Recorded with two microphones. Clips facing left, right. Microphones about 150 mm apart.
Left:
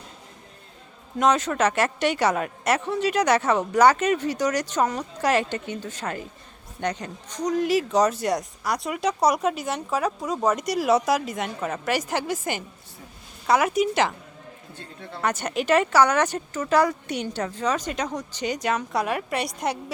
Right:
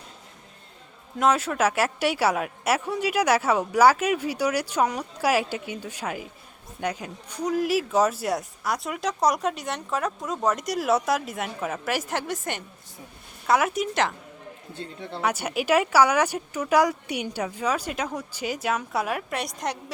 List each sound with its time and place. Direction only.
1.2 s speech: 5° right (ahead or behind)
15.2 s speech: 10° right (ahead or behind)